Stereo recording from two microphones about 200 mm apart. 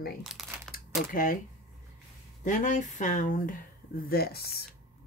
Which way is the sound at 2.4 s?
40° left (ahead or behind).